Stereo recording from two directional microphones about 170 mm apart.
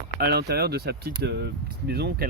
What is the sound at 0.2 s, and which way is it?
Speech, 70° right (ahead or behind).